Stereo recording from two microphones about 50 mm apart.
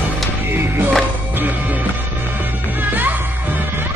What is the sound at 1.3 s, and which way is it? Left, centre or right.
Music, right.